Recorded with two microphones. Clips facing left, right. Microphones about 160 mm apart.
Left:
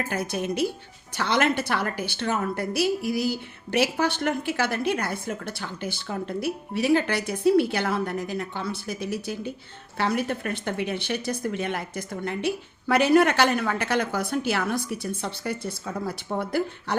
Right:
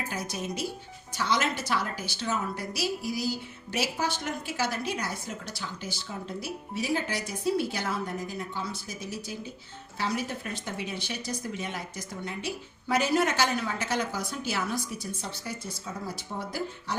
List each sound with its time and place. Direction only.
0.1 s a woman's voice: 60° left (ahead or behind)